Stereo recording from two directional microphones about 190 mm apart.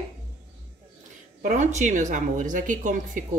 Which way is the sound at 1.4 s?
40° right (ahead or behind).